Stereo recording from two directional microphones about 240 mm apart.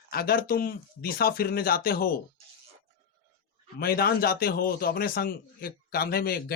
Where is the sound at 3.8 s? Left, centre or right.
Left.